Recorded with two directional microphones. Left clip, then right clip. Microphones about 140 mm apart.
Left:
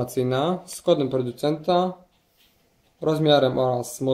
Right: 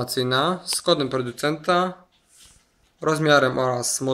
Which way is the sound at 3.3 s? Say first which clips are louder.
Right 1 dB; 40° right (ahead or behind).